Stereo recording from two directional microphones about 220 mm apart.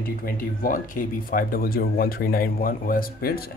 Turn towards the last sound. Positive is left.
turn(degrees=40)  # may be behind; listen again after turning